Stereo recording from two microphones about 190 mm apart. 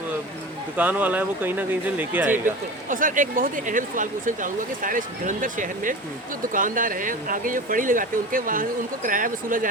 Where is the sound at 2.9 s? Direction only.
45° right (ahead or behind).